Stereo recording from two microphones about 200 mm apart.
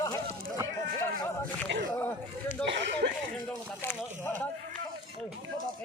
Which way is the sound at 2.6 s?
60° right (ahead or behind).